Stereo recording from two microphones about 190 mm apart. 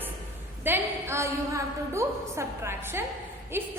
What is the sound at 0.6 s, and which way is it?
A woman's voice, 10° right (ahead or behind).